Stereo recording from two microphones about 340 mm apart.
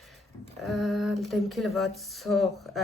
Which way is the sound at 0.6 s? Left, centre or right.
Centre.